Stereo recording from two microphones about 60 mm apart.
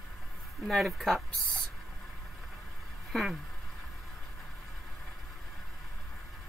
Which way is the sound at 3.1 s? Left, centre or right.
Centre.